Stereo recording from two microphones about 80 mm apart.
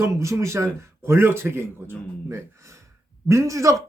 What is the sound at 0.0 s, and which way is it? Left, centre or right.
Speech, right.